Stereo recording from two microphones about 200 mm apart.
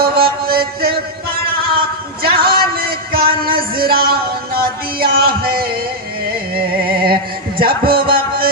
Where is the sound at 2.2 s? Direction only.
25° right (ahead or behind).